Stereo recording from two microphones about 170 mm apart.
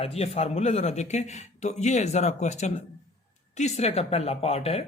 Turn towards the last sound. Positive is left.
turn(degrees=35)  # may be behind; listen again after turning